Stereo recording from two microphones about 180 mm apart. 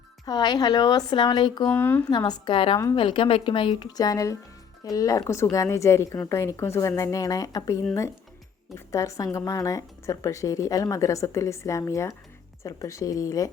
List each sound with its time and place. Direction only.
0.3 s speech: 25° left (ahead or behind)
1.6 s speech: 10° left (ahead or behind)
2.0 s speech: 25° left (ahead or behind)
8.9 s speech: 15° left (ahead or behind)